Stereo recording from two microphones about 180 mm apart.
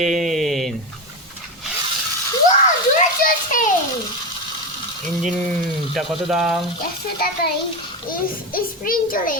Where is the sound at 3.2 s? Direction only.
45° left (ahead or behind).